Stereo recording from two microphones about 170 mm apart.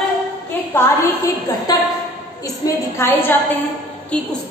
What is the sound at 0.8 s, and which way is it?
A woman's voice, 20° left (ahead or behind).